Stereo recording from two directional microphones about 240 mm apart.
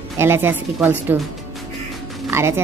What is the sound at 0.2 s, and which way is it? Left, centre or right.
Speech, centre.